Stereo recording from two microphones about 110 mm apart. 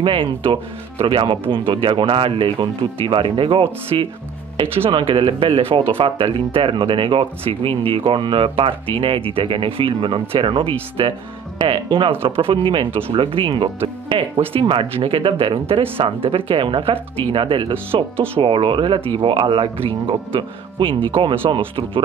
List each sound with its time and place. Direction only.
0.0 s speech: 50° right (ahead or behind)